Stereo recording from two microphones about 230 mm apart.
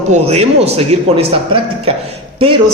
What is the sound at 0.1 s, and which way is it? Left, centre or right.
Speech, right.